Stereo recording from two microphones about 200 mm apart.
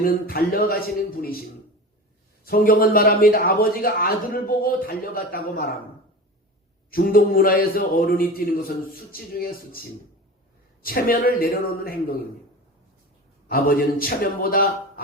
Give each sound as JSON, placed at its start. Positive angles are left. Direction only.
{"t": 0.0, "sound": "a man's voice", "side_deg": 45}
{"t": 2.4, "sound": "a man's voice", "side_deg": 45}
{"t": 6.9, "sound": "a man's voice", "side_deg": 45}
{"t": 10.8, "sound": "a man's voice", "side_deg": 45}
{"t": 13.5, "sound": "a man's voice", "side_deg": 45}